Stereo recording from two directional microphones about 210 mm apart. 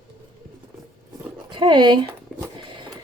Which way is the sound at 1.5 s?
20° right (ahead or behind).